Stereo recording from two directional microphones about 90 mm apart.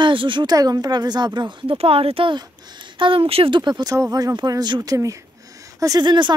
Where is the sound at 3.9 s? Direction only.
40° right (ahead or behind).